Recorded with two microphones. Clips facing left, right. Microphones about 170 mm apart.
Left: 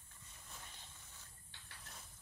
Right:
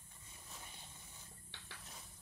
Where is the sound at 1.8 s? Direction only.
Centre (ahead or behind).